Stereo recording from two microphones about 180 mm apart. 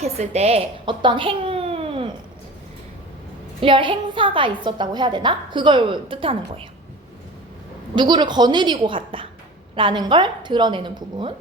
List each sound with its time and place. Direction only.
0.0 s a child's voice: 35° right (ahead or behind)
3.6 s a woman's voice: 30° right (ahead or behind)
7.9 s a woman's voice: 25° right (ahead or behind)